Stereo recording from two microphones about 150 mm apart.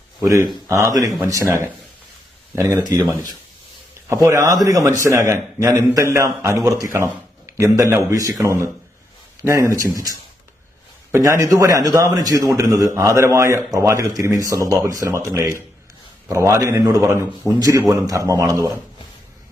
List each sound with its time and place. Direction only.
0.2 s a man's voice: 20° right (ahead or behind)
4.1 s a man's voice: 20° right (ahead or behind)